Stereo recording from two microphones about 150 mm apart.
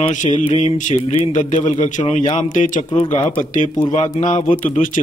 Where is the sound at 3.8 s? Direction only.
45° left (ahead or behind).